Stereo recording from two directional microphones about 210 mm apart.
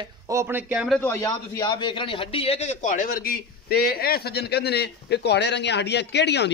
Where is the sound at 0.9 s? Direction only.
10° left (ahead or behind).